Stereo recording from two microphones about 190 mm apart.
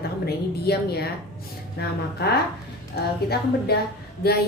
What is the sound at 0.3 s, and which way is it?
A woman's voice, 55° left (ahead or behind).